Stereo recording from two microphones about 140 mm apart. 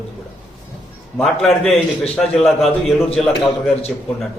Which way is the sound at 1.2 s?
Centre (ahead or behind).